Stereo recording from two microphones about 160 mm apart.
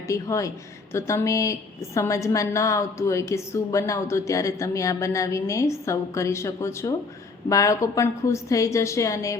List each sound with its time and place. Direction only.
0.1 s a woman's voice: 20° left (ahead or behind)